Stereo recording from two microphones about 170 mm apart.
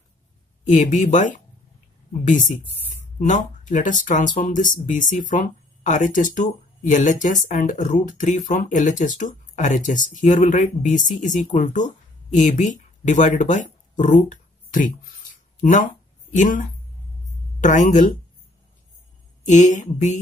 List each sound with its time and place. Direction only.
0.7 s speech: 45° left (ahead or behind)
3.2 s speech: 45° left (ahead or behind)
16.3 s speech: 50° left (ahead or behind)
19.4 s speech: 45° left (ahead or behind)